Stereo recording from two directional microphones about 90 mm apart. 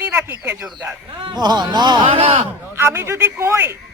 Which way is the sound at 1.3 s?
50° right (ahead or behind).